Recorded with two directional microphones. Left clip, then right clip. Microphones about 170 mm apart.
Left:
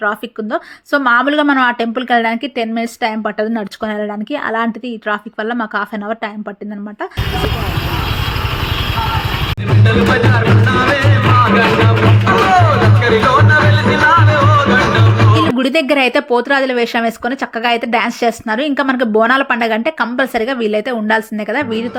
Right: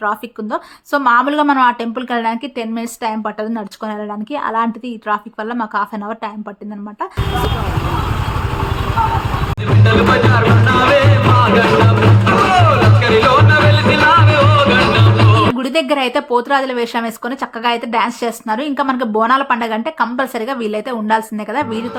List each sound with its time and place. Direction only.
0.0 s speech: 10° left (ahead or behind)
9.8 s music: 10° right (ahead or behind)
15.5 s speech: 25° left (ahead or behind)